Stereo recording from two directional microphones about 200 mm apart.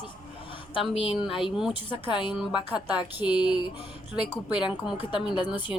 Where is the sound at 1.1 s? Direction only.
5° right (ahead or behind).